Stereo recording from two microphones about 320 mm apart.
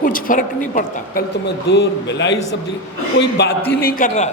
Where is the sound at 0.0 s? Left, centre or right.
Left.